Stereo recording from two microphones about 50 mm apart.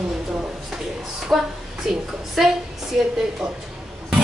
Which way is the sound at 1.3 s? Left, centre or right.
Centre.